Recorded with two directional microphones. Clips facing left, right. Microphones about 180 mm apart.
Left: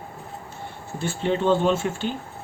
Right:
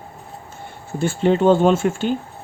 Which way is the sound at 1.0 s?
50° right (ahead or behind).